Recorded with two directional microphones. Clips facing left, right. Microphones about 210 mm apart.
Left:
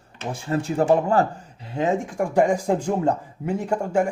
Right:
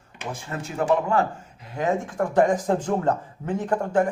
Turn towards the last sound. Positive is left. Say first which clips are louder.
# even
turn(degrees=10)  # may be behind; listen again after turning